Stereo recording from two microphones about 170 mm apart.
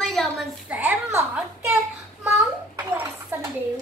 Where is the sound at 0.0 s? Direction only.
Centre (ahead or behind).